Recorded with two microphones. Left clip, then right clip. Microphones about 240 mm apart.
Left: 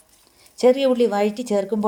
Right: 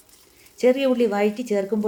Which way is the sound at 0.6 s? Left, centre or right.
Left.